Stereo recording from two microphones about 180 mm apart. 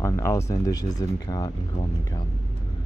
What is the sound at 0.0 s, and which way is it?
Speech, 15° left (ahead or behind).